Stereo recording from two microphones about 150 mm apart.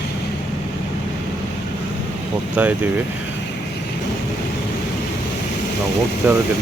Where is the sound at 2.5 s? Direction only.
10° right (ahead or behind).